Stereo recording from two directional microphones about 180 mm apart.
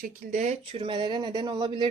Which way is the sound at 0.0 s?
45° right (ahead or behind).